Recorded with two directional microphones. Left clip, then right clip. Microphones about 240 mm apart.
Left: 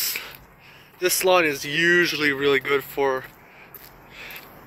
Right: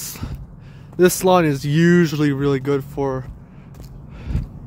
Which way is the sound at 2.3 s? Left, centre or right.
Centre.